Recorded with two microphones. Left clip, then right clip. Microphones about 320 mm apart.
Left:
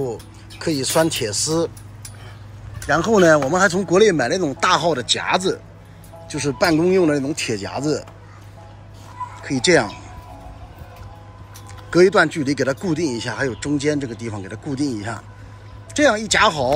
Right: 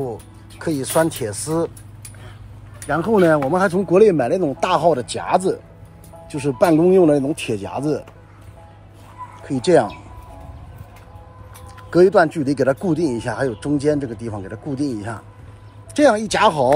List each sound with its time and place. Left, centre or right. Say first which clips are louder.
0.0 s speech: left 1 dB; centre
2.9 s speech: left 2 dB; centre
9.4 s speech: right 1 dB; centre
11.9 s speech: right 1 dB; centre